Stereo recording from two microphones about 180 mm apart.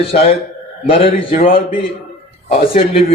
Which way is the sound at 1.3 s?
50° left (ahead or behind).